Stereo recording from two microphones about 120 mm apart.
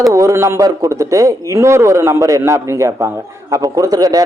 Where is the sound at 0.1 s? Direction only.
25° right (ahead or behind).